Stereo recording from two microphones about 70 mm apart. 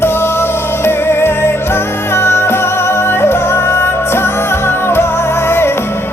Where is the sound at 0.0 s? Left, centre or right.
Left.